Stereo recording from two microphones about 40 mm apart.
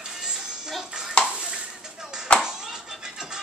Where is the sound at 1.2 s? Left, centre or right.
Right.